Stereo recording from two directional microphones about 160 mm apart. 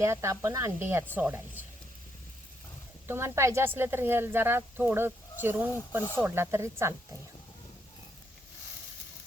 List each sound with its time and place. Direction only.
0.0 s speech: 20° right (ahead or behind)
3.1 s speech: 15° right (ahead or behind)